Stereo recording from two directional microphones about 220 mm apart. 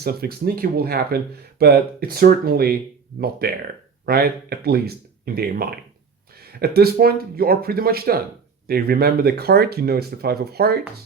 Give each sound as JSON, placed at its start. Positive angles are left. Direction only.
{"t": 0.0, "sound": "speech", "side_deg": -45}